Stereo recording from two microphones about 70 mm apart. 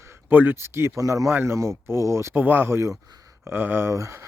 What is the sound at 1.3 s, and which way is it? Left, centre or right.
Speech, right.